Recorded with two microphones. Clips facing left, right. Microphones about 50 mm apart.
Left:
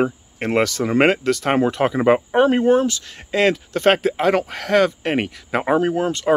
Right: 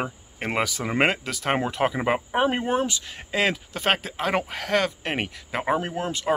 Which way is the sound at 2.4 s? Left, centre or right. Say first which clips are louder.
Left 9 dB; centre.